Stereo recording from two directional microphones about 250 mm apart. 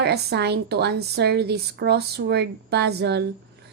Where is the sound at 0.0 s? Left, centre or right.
Right.